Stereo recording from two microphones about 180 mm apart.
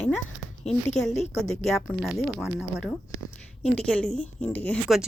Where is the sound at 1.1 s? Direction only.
40° left (ahead or behind).